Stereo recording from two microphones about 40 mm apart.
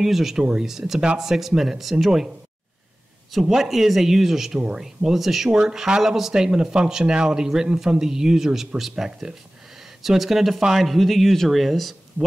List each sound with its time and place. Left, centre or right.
0.0 s speech: centre
5.5 s speech: centre